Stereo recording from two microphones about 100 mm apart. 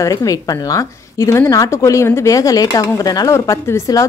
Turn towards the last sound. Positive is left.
turn(degrees=30)  # may be behind; listen again after turning